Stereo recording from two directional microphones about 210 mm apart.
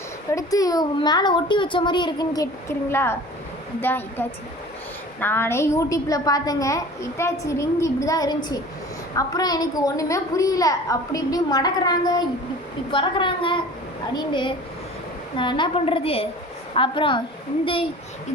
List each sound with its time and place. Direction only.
0.3 s a child's voice: 15° left (ahead or behind)